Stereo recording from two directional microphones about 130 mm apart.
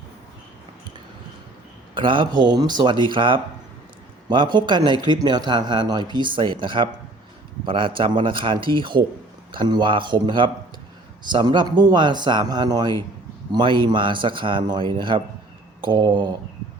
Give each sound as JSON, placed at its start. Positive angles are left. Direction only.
{"t": 2.0, "sound": "a man's voice", "side_deg": -40}